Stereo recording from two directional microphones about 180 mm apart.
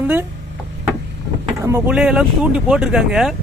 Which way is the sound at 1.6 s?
15° right (ahead or behind).